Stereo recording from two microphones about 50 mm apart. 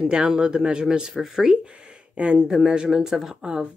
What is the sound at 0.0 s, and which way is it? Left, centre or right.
Speech, centre.